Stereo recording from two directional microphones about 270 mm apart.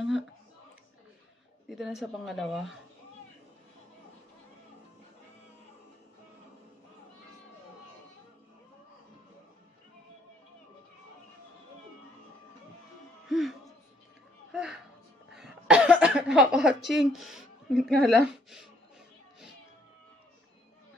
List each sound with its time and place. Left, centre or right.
1.7 s a woman's voice: centre
13.3 s music: centre
15.3 s cough: centre